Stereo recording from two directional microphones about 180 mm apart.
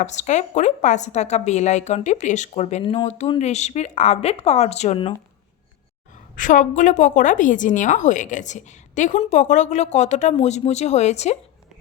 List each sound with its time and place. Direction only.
0.0 s a woman's voice: 40° left (ahead or behind)
6.3 s a woman's voice: 45° left (ahead or behind)